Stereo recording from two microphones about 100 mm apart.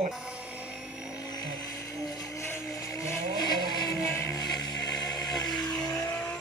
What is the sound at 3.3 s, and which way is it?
Vehicle, 40° left (ahead or behind).